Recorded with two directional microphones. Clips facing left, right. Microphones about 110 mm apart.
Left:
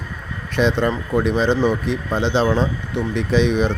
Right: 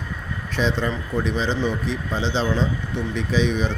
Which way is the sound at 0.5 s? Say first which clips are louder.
Left 5 dB; 60° left (ahead or behind).